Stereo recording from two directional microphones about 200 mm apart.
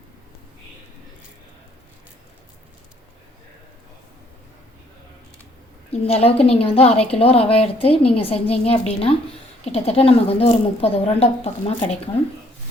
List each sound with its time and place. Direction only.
5.9 s a woman's voice: 30° left (ahead or behind)